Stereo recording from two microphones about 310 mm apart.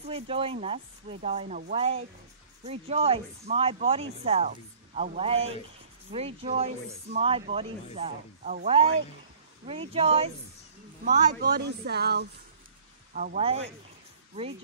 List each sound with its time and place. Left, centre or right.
0.0 s speech: centre
9.7 s speech: centre